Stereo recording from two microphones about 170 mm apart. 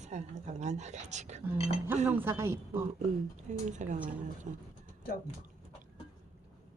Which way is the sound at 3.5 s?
45° right (ahead or behind).